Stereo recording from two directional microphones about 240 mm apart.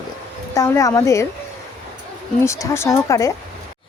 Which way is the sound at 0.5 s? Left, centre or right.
Centre.